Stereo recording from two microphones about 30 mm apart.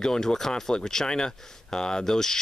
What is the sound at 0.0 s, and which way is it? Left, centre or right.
Speech, centre.